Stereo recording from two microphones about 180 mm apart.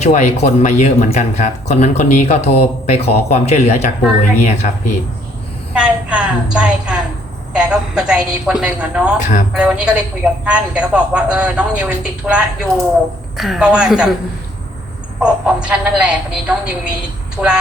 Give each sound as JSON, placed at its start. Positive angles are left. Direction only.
{"t": 0.0, "sound": "speech", "side_deg": 40}
{"t": 5.7, "sound": "a sound", "side_deg": -5}
{"t": 7.5, "sound": "a woman's voice", "side_deg": -5}
{"t": 9.1, "sound": "speech", "side_deg": 40}
{"t": 9.5, "sound": "a woman's voice", "side_deg": -5}
{"t": 15.2, "sound": "a woman's voice", "side_deg": -5}